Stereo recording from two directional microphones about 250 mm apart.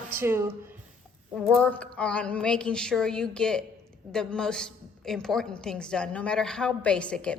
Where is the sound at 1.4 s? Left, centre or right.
Centre.